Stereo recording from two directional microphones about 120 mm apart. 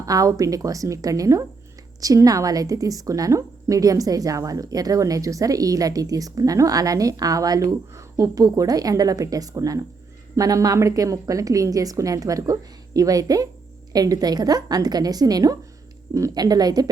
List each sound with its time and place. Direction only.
0.0 s a woman's voice: 30° right (ahead or behind)